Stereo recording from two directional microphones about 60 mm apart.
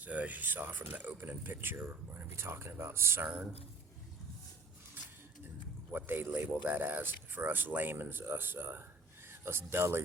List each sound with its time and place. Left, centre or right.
0.0 s speech: right
5.0 s a sound: right
5.9 s speech: right